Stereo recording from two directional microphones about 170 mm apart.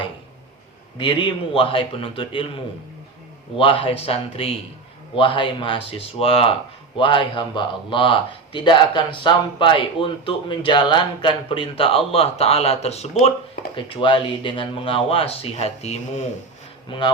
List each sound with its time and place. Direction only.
0.9 s speech: 30° left (ahead or behind)
3.6 s speech: 30° left (ahead or behind)
13.7 s speech: 30° left (ahead or behind)
16.9 s speech: 30° left (ahead or behind)